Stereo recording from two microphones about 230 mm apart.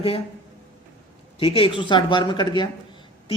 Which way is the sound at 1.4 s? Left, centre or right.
Left.